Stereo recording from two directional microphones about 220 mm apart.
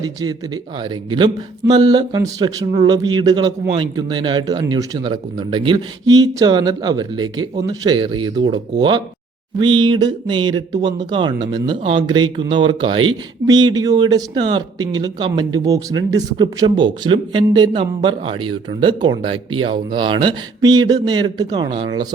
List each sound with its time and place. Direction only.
0.0 s speech: 15° right (ahead or behind)